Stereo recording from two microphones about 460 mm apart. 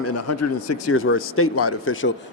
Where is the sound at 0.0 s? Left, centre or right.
Left.